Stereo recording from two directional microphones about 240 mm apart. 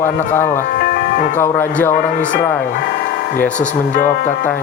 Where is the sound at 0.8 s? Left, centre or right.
Left.